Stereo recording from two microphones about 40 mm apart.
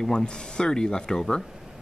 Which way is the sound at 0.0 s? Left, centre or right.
Centre.